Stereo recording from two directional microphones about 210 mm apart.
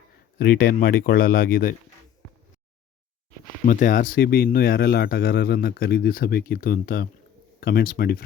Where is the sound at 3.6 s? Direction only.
40° left (ahead or behind).